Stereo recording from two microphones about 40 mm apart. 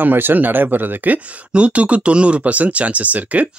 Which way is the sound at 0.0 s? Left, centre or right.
Right.